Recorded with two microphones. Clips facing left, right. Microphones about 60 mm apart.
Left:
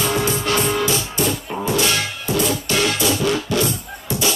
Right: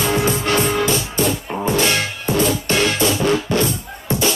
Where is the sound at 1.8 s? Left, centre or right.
Right.